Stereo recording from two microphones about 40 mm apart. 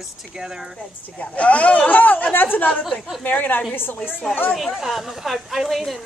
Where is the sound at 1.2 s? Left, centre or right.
Left.